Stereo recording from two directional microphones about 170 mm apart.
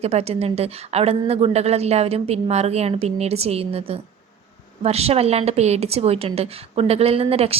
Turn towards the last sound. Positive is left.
turn(degrees=-35)  # may be behind; listen again after turning